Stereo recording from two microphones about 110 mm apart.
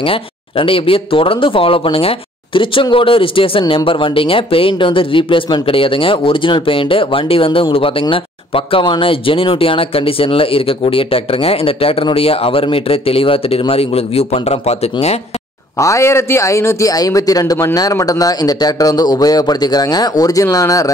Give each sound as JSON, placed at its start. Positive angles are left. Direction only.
{"t": 0.0, "sound": "speech", "side_deg": 55}
{"t": 15.8, "sound": "a man's voice", "side_deg": 25}